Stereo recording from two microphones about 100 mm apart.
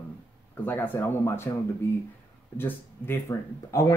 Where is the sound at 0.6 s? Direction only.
20° left (ahead or behind).